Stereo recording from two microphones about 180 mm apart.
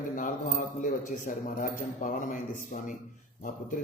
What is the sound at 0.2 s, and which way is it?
A man's voice, 45° left (ahead or behind).